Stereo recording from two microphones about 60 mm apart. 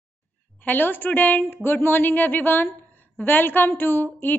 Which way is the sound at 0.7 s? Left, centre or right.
Left.